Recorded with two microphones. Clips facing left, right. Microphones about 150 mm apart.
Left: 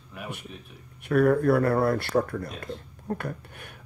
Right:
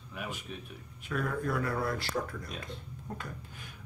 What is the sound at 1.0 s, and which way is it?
Speech, 65° left (ahead or behind).